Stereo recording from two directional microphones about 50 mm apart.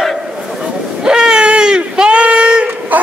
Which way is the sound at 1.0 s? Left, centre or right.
Centre.